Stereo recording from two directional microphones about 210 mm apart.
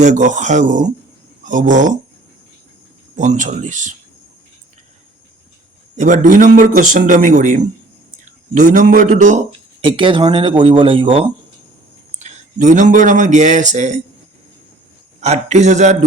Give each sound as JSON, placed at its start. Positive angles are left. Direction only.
{"t": 0.0, "sound": "a man's voice", "side_deg": -35}
{"t": 3.2, "sound": "a man's voice", "side_deg": -35}
{"t": 6.0, "sound": "a man's voice", "side_deg": -40}
{"t": 12.2, "sound": "speech", "side_deg": -35}
{"t": 15.2, "sound": "a man's voice", "side_deg": -30}